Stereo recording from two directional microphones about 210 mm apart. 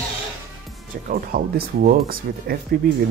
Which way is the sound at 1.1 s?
45° right (ahead or behind).